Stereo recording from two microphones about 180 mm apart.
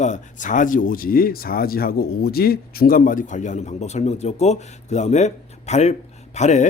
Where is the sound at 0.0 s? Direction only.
45° left (ahead or behind).